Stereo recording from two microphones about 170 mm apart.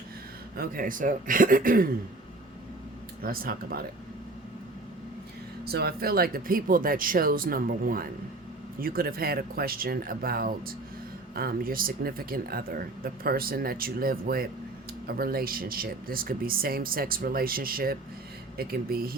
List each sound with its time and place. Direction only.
0.5 s speech: 60° right (ahead or behind)
3.2 s speech: 60° right (ahead or behind)
5.6 s speech: 65° right (ahead or behind)